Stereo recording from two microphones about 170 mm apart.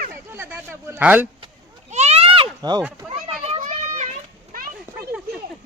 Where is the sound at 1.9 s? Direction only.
40° right (ahead or behind).